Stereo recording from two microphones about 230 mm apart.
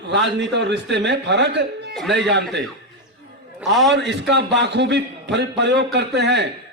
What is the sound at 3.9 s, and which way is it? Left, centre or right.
A man's voice, right.